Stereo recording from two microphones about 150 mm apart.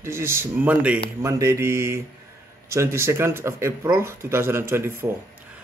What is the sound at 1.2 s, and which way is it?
Mantra, 20° right (ahead or behind).